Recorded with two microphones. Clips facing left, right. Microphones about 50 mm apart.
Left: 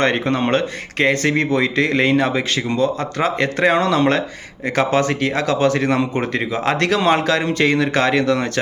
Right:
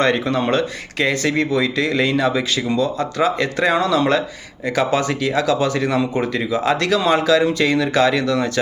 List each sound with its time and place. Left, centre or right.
0.0 s speech: left